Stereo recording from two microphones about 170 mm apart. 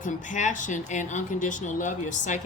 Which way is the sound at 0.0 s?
45° left (ahead or behind).